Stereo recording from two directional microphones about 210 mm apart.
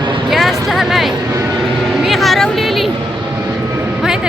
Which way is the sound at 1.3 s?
15° right (ahead or behind).